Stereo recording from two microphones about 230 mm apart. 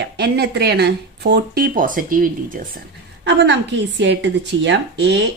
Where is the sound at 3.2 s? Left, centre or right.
Right.